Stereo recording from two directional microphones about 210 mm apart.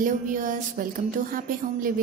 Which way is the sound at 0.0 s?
40° right (ahead or behind).